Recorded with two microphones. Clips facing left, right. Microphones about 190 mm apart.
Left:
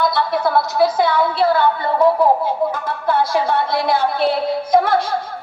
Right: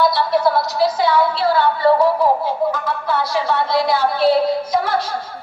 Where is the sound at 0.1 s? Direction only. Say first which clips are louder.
Right 1 dB; 55° left (ahead or behind).